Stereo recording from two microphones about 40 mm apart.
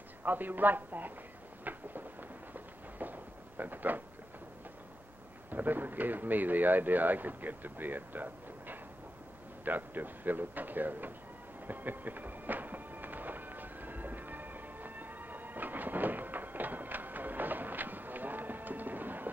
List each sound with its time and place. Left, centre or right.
0.2 s speech: right
1.6 s a sound: right
5.5 s speech: right
11.6 s train: right